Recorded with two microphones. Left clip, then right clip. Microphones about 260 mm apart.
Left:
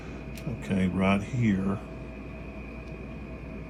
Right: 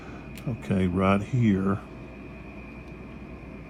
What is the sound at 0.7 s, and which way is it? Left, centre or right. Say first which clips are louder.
Speech: right 3 dB; right.